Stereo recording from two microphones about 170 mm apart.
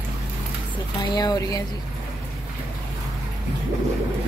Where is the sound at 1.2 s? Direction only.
20° left (ahead or behind).